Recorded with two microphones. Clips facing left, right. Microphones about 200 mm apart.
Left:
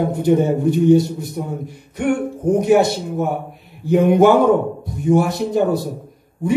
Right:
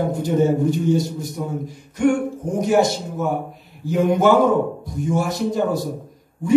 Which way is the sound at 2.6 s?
60° left (ahead or behind).